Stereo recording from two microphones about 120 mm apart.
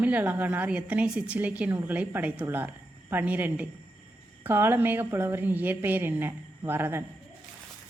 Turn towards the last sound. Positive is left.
turn(degrees=-15)  # may be behind; listen again after turning